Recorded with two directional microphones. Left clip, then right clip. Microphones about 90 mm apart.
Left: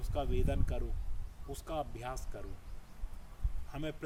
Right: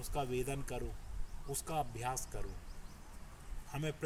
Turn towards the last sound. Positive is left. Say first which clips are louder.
# even
turn(degrees=20)  # may be behind; listen again after turning